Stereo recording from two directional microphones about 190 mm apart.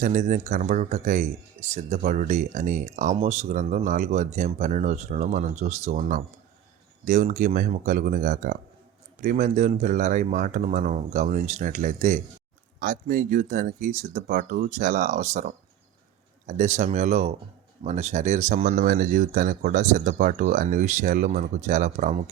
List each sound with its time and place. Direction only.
0.0 s speech: 40° right (ahead or behind)